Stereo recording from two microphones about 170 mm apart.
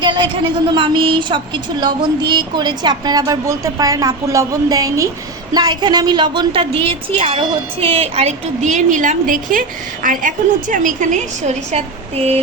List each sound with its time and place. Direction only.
0.0 s a woman's voice: 25° right (ahead or behind)